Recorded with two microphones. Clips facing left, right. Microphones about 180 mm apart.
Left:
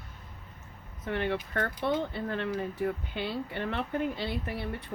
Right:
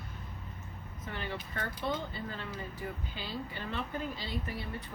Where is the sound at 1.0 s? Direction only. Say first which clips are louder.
Left 9 dB; 65° left (ahead or behind).